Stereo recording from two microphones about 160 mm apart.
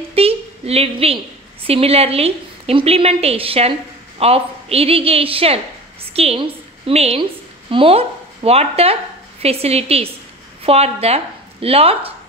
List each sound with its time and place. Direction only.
0.1 s a woman's voice: 40° right (ahead or behind)